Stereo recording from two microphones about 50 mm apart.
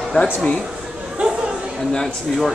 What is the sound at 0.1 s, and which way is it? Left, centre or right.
Speech, centre.